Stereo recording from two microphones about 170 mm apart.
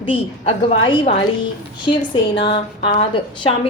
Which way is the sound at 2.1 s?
30° left (ahead or behind).